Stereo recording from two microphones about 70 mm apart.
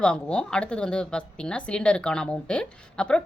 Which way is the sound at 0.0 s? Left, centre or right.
Centre.